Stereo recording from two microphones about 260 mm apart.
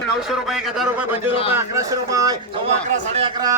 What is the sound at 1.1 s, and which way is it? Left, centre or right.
Speech, left.